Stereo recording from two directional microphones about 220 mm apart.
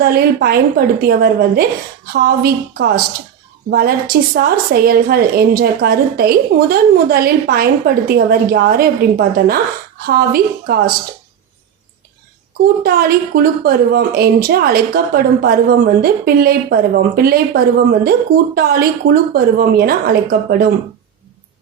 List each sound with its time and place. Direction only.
0.0 s a woman's voice: 45° right (ahead or behind)
12.8 s a woman's voice: 45° right (ahead or behind)